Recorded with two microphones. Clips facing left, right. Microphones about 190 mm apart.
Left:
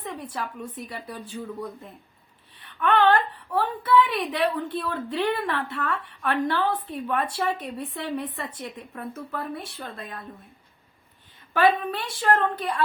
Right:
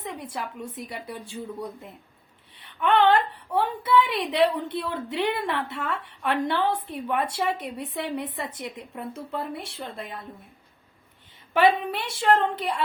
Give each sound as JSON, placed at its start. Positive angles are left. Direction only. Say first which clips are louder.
{"t": 0.0, "sound": "a woman's voice", "louder": "left 1 dB", "side_deg": -25}
{"t": 11.5, "sound": "a woman's voice", "louder": "right 1 dB", "side_deg": -20}